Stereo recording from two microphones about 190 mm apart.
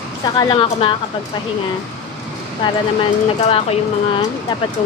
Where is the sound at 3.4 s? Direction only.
30° left (ahead or behind).